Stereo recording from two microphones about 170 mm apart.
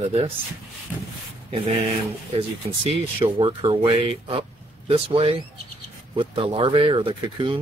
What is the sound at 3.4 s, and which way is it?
Speech, 30° right (ahead or behind).